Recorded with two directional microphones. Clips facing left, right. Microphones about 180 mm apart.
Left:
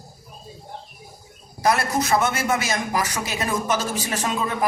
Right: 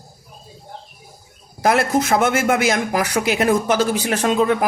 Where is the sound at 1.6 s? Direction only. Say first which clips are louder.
Right 4 dB; 55° right (ahead or behind).